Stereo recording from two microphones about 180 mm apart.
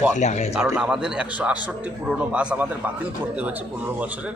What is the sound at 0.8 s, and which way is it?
A man's voice, 5° right (ahead or behind).